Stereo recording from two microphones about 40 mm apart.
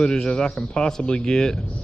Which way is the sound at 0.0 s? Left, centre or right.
Centre.